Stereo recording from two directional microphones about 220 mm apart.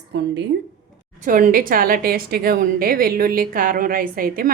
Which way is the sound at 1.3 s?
40° right (ahead or behind).